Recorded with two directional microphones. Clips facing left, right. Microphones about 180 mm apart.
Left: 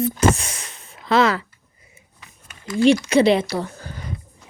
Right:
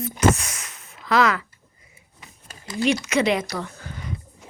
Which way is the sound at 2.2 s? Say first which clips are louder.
Right 2 dB; 25° right (ahead or behind).